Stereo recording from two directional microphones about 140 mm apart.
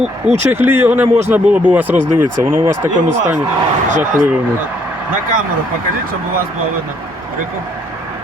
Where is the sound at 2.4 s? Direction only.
25° right (ahead or behind).